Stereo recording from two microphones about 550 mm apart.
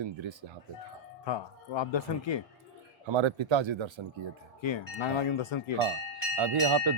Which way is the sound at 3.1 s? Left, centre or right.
Right.